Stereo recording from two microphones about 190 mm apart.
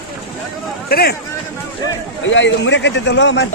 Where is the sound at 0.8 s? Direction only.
55° left (ahead or behind).